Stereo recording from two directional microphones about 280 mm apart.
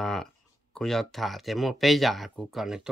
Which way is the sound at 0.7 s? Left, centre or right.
Centre.